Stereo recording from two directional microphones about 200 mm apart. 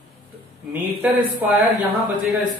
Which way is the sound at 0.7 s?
10° right (ahead or behind).